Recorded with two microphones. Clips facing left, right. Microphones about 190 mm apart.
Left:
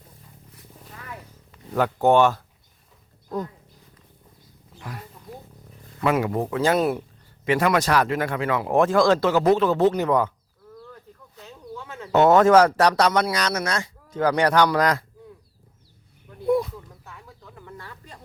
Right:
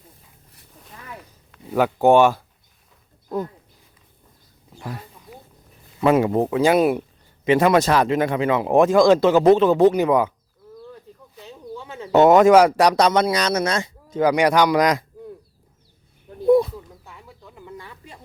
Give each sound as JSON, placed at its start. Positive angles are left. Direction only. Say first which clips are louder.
{"t": 1.7, "sound": "speech", "louder": "right 3 dB", "side_deg": -10}
{"t": 6.0, "sound": "speech", "louder": "right 5 dB", "side_deg": -25}
{"t": 11.3, "sound": "speech", "louder": "right 3 dB", "side_deg": -15}
{"t": 16.5, "sound": "a sound", "louder": "right 6 dB", "side_deg": -30}
{"t": 17.2, "sound": "bird", "louder": "right 5 dB", "side_deg": -10}